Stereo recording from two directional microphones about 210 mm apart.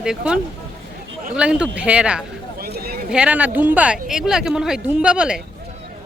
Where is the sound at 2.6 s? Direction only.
45° right (ahead or behind).